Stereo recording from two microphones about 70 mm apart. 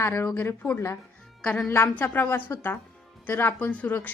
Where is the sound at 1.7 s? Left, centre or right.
Left.